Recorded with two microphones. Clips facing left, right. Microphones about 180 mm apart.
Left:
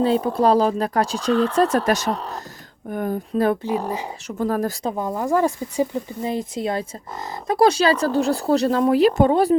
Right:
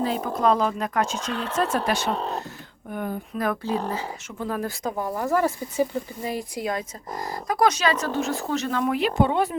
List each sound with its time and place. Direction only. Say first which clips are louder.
0.0 s speech: left 5 dB; 30° left (ahead or behind)
2.1 s speech: right 2 dB; 25° right (ahead or behind)
2.9 s speech: left 5 dB; 45° left (ahead or behind)
3.3 s speech: left 7 dB; 30° left (ahead or behind)
3.6 s speech: left 3 dB; 15° left (ahead or behind)
4.3 s speech: left 8 dB; 40° left (ahead or behind)
4.9 s speech: left 1 dB; 20° left (ahead or behind); by 9.6 s 35° left (ahead or behind)